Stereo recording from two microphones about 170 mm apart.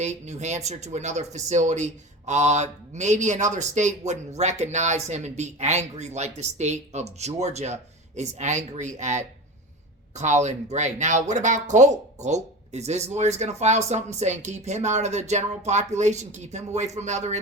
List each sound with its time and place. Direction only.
0.0 s speech: 45° right (ahead or behind)